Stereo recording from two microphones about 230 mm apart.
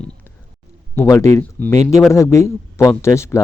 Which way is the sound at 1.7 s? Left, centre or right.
Right.